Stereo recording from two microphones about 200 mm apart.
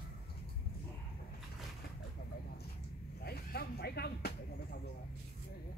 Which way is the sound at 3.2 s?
50° left (ahead or behind).